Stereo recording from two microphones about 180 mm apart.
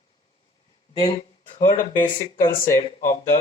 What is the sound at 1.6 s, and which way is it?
Speech, 45° left (ahead or behind).